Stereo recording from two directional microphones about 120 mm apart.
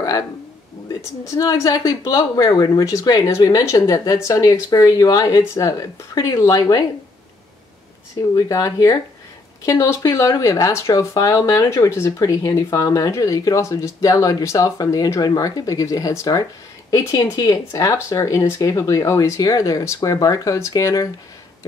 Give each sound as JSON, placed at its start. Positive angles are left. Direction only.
{"t": 0.8, "sound": "speech", "side_deg": 25}
{"t": 8.4, "sound": "speech", "side_deg": 30}